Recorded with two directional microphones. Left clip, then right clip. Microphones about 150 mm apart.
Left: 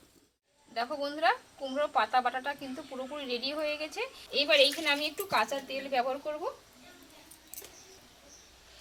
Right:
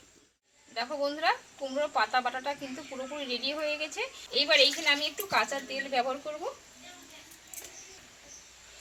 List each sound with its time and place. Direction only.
0.7 s speech: 5° left (ahead or behind)
4.3 s a woman's voice: 20° left (ahead or behind)